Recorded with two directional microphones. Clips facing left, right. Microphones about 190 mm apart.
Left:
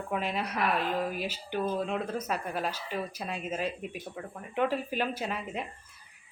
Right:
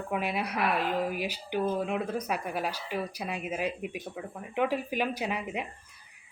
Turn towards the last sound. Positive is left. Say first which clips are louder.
# right 2 dB
turn(degrees=-15)  # may be behind; listen again after turning